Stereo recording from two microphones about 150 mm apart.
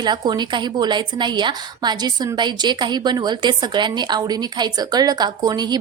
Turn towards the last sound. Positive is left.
turn(degrees=-25)  # may be behind; listen again after turning